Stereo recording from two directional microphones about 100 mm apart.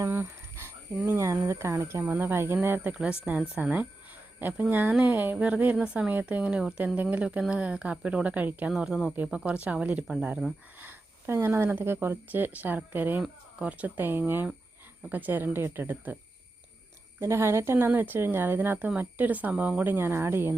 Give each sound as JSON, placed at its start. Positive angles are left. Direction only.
{"t": 0.0, "sound": "a woman's voice", "side_deg": -25}
{"t": 8.7, "sound": "a woman's voice", "side_deg": -5}
{"t": 17.2, "sound": "a woman's voice", "side_deg": -25}